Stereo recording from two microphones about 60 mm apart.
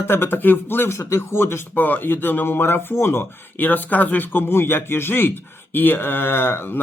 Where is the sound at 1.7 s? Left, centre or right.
Left.